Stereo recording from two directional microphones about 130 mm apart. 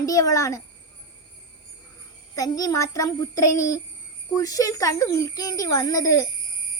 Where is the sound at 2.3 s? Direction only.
25° left (ahead or behind).